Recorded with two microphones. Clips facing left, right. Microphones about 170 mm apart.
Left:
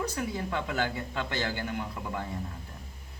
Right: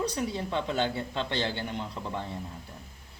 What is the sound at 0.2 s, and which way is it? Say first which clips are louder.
Speech: right 2 dB; 25° right (ahead or behind).